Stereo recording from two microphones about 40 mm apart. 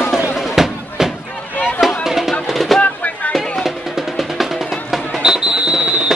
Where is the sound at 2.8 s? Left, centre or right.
Left.